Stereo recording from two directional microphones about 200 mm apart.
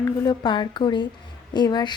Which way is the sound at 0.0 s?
20° left (ahead or behind).